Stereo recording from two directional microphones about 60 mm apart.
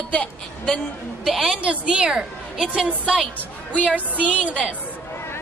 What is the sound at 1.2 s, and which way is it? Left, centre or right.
Speech, centre.